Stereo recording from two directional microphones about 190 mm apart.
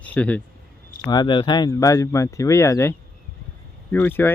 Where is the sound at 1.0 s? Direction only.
20° left (ahead or behind).